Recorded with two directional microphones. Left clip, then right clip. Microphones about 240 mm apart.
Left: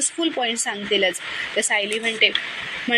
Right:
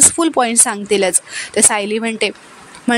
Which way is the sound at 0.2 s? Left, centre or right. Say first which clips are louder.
Right 8 dB; right.